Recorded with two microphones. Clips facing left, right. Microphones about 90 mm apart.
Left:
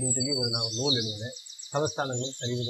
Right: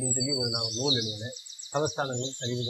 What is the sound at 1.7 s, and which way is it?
Speech, centre (ahead or behind).